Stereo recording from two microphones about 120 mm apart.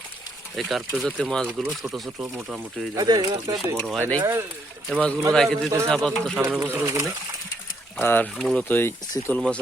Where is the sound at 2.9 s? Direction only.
35° right (ahead or behind).